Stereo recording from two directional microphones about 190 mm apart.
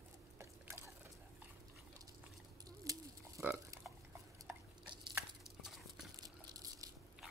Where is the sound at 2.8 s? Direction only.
20° right (ahead or behind).